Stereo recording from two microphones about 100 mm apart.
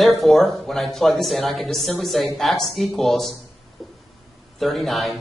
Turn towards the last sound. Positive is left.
turn(degrees=0)  # may be behind; listen again after turning